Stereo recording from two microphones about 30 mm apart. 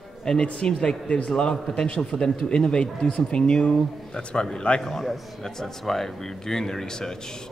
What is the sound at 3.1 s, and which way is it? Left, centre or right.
Speech, left.